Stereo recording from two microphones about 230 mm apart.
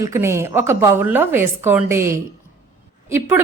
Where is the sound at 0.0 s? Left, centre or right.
Centre.